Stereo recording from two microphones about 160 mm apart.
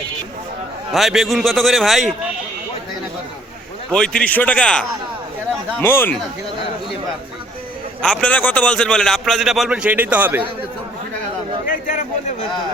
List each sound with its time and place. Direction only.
0.9 s a man's voice: centre (ahead or behind)
3.9 s a man's voice: 5° left (ahead or behind)
8.0 s a man's voice: 5° left (ahead or behind); by 10.4 s 10° right (ahead or behind)
11.6 s a sound: 55° left (ahead or behind)